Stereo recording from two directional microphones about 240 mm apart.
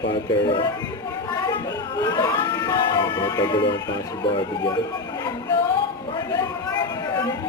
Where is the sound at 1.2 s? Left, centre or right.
Centre.